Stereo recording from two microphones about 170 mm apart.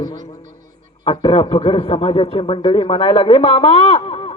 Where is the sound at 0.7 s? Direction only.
30° left (ahead or behind).